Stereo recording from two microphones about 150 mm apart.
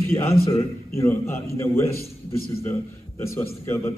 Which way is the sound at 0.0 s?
15° left (ahead or behind).